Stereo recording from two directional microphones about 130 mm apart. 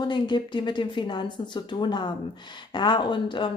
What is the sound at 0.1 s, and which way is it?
Speech, 35° left (ahead or behind).